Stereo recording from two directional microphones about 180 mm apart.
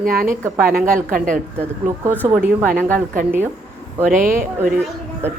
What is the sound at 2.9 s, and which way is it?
A man's voice, 50° right (ahead or behind).